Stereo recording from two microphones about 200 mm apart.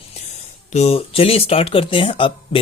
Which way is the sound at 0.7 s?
35° left (ahead or behind).